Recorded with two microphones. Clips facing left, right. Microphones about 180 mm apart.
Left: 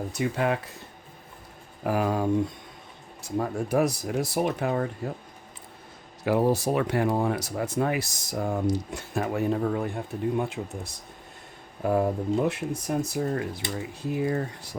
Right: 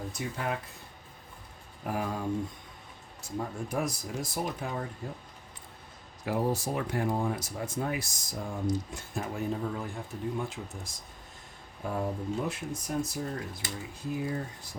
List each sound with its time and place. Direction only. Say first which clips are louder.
0.1 s speech: left 10 dB; 75° left (ahead or behind)
1.8 s speech: left 8 dB; 85° left; by 5.1 s 70° left (ahead or behind)
6.2 s speech: left 7 dB; 75° left (ahead or behind)